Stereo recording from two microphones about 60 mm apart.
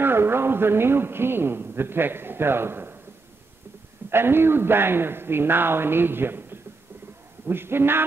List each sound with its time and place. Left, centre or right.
0.0 s a man's voice: right
4.1 s speech: right